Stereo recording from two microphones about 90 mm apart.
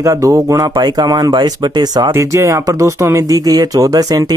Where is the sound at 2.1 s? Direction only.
35° right (ahead or behind).